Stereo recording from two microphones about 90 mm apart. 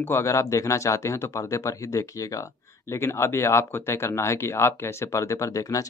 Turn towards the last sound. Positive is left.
turn(degrees=40)  # may be behind; listen again after turning